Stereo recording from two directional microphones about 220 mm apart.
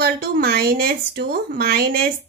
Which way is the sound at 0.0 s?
45° right (ahead or behind).